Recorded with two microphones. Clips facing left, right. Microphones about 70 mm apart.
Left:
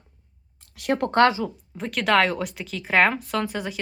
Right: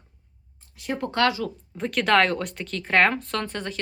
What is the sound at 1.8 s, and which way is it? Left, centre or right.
A woman's voice, centre.